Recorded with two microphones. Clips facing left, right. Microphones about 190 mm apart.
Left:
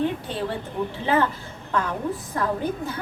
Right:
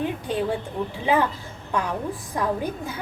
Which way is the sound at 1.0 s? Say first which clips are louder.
Right 1 dB; 15° right (ahead or behind).